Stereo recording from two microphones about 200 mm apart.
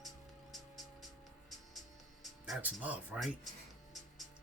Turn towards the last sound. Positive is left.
turn(degrees=-5)  # may be behind; listen again after turning